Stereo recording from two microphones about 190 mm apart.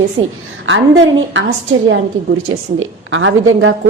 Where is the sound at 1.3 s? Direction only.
90° right.